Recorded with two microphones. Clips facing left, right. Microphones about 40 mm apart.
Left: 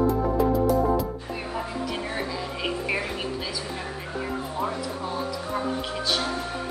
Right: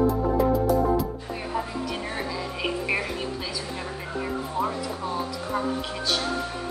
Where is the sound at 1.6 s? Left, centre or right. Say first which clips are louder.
Left 1 dB; centre.